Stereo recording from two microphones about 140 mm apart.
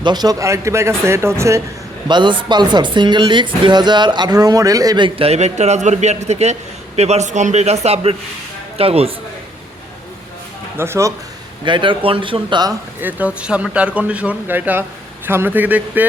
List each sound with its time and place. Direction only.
0.0 s speech: 30° right (ahead or behind)
2.0 s a man's voice: 35° right (ahead or behind)
10.8 s speech: 20° right (ahead or behind)
11.6 s speech: 35° right (ahead or behind)
13.0 s speech: 10° right (ahead or behind)